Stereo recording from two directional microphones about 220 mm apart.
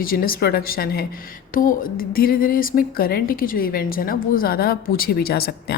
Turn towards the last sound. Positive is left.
turn(degrees=45)  # may be behind; listen again after turning